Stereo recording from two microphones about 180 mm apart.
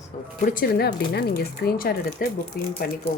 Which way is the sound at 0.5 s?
60° left (ahead or behind).